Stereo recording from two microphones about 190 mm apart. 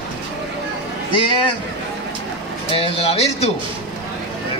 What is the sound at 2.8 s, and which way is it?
Speech, 30° left (ahead or behind).